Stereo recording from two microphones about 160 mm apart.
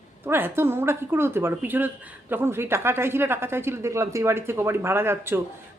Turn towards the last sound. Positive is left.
turn(degrees=-15)  # may be behind; listen again after turning